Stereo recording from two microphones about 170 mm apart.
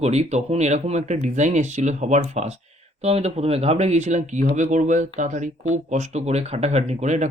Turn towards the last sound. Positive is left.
turn(degrees=-40)  # may be behind; listen again after turning